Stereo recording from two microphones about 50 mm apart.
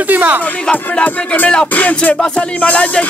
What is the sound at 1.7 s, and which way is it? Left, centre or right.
Music, left.